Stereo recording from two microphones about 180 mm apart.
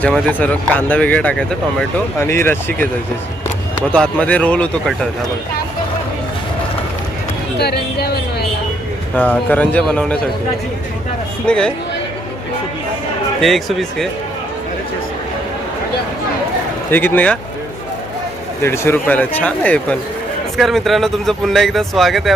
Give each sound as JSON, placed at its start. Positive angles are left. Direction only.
{"t": 0.0, "sound": "speech", "side_deg": 10}
{"t": 3.9, "sound": "speech", "side_deg": 5}
{"t": 7.6, "sound": "speech", "side_deg": 60}
{"t": 9.1, "sound": "speech", "side_deg": 10}
{"t": 11.4, "sound": "speech", "side_deg": 5}
{"t": 13.4, "sound": "speech", "side_deg": 0}
{"t": 16.9, "sound": "speech", "side_deg": 10}
{"t": 18.6, "sound": "speech", "side_deg": 15}